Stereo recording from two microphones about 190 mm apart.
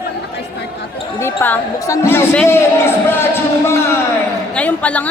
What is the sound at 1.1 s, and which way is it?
A man's voice, 10° left (ahead or behind).